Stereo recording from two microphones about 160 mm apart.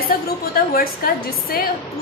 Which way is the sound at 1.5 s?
65° left (ahead or behind).